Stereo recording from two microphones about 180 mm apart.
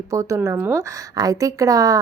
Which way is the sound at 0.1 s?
15° right (ahead or behind).